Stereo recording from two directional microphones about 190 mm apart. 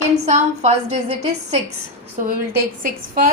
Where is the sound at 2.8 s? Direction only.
45° right (ahead or behind).